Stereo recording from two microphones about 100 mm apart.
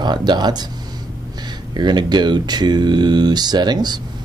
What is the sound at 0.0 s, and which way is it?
Speech, 45° right (ahead or behind).